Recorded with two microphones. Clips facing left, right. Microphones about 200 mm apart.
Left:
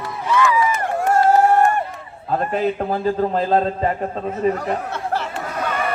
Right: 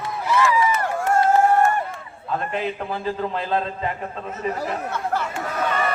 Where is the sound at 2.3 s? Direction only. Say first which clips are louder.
Left 5 dB; 40° left (ahead or behind).